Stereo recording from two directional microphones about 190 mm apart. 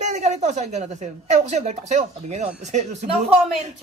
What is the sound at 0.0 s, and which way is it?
A woman's voice, 35° right (ahead or behind).